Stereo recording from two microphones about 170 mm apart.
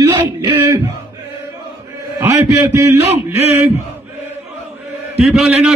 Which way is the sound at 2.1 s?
15° right (ahead or behind).